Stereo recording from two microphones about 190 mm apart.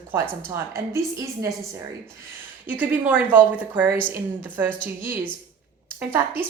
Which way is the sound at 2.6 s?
10° right (ahead or behind).